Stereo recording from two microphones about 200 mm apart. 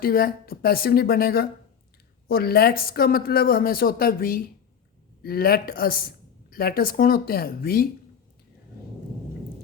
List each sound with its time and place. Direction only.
0.0 s speech: 50° left (ahead or behind)